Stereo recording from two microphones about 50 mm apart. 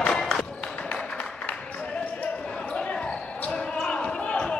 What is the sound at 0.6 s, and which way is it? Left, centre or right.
Music, left.